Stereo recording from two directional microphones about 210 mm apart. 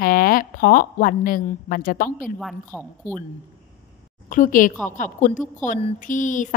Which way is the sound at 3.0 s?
40° left (ahead or behind).